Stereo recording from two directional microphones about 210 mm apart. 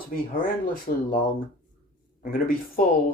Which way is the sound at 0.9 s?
40° left (ahead or behind).